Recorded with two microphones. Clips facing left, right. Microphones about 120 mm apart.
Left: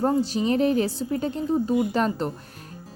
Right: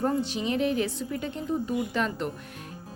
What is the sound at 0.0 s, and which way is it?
Speech, 35° left (ahead or behind).